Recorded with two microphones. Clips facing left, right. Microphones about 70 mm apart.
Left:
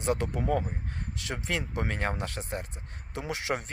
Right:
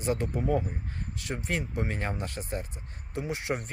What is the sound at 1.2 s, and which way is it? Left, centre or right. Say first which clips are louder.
Speech: right 1 dB; left.